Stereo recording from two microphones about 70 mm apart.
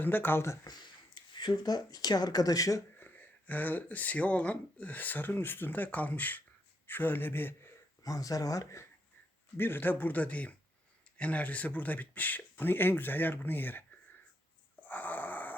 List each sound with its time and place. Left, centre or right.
0.0 s speech: left
0.6 s speech: left
3.0 s speech: left
8.0 s speech: left
9.6 s speech: left
14.8 s a sound: left